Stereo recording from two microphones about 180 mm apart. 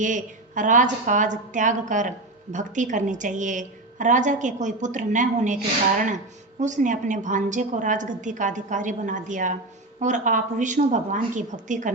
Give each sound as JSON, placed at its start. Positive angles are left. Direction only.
{"t": 0.0, "sound": "a woman's voice", "side_deg": -45}
{"t": 6.6, "sound": "a woman's voice", "side_deg": -45}